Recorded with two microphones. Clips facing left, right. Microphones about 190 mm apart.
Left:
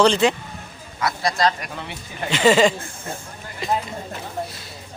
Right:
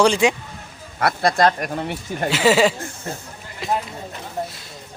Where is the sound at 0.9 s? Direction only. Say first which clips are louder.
Right 4 dB; 55° right (ahead or behind).